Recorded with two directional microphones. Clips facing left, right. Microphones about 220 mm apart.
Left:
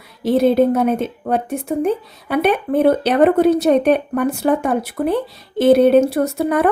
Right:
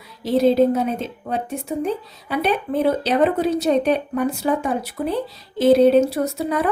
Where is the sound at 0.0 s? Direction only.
60° left (ahead or behind).